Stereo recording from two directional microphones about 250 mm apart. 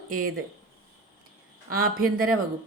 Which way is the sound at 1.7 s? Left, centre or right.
Right.